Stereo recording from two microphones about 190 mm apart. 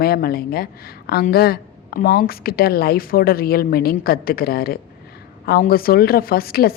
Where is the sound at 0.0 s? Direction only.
55° left (ahead or behind).